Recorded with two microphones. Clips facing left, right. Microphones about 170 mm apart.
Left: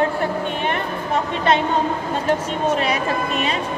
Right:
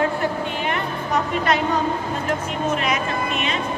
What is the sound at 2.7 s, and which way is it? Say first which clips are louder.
Speech: left 2 dB; 35° left (ahead or behind).